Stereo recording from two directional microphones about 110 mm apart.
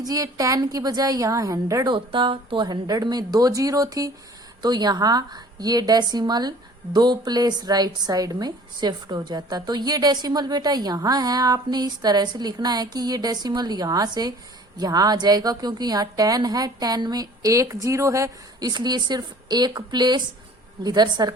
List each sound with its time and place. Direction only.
0.0 s a woman's voice: 35° right (ahead or behind)
1.9 s speech: 45° right (ahead or behind)
2.6 s a woman's voice: 35° right (ahead or behind)